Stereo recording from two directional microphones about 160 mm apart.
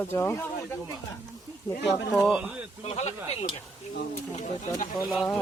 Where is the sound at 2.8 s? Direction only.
40° left (ahead or behind).